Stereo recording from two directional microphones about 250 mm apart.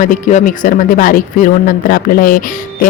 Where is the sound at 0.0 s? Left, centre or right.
Left.